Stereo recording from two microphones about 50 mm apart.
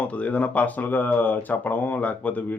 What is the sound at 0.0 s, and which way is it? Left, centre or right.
Speech, left.